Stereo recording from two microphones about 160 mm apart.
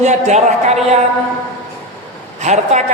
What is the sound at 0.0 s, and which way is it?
Speech, 45° right (ahead or behind).